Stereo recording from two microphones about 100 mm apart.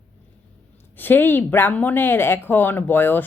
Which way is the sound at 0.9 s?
20° left (ahead or behind).